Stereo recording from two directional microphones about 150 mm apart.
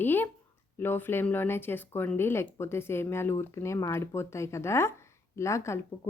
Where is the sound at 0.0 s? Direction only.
15° left (ahead or behind).